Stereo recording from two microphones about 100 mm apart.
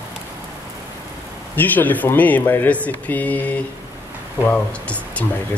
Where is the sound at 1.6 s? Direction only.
15° left (ahead or behind).